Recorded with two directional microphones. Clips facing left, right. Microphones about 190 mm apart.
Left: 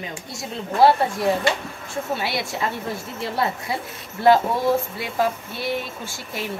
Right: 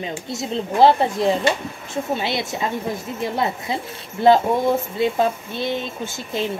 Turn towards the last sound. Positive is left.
turn(degrees=-20)  # may be behind; listen again after turning